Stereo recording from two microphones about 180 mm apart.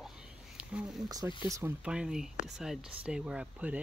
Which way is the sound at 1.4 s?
20° right (ahead or behind).